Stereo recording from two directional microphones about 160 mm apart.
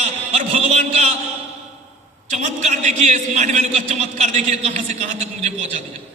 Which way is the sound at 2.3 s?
45° right (ahead or behind).